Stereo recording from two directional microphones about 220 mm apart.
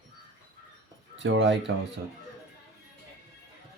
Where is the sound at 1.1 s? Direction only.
55° right (ahead or behind).